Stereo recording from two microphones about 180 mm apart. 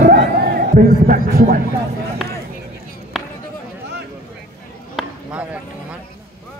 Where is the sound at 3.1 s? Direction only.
Centre (ahead or behind).